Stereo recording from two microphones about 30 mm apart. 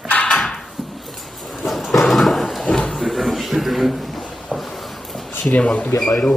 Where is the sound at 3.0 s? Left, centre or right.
Centre.